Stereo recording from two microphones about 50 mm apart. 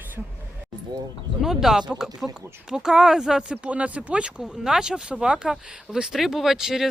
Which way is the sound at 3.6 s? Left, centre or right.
Right.